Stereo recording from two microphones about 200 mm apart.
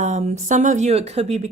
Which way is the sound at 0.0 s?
35° right (ahead or behind).